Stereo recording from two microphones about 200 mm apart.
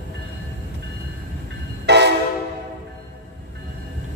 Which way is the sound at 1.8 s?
60° right (ahead or behind).